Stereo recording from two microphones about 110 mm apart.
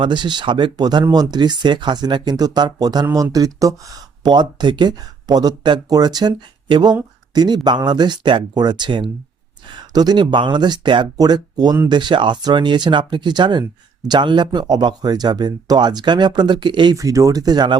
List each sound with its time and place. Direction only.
0.0 s speech: 45° right (ahead or behind)
17.0 s speech: 30° right (ahead or behind)